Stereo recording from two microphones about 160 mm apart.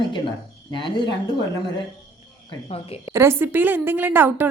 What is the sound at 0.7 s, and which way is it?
Speech, 30° left (ahead or behind).